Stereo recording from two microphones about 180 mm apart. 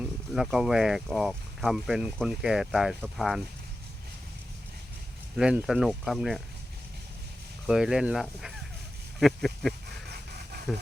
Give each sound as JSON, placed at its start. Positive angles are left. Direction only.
{"t": 0.0, "sound": "speech", "side_deg": -5}
{"t": 5.4, "sound": "speech", "side_deg": -5}
{"t": 7.7, "sound": "speech", "side_deg": -5}
{"t": 10.1, "sound": "dog", "side_deg": -65}